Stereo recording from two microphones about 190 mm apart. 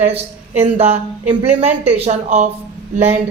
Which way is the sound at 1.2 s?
10° right (ahead or behind).